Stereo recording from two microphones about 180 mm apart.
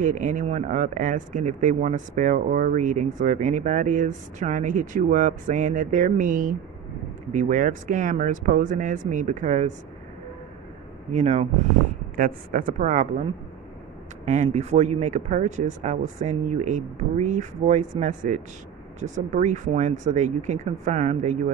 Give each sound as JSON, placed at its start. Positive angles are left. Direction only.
{"t": 0.0, "sound": "speech", "side_deg": -45}
{"t": 11.1, "sound": "speech", "side_deg": -40}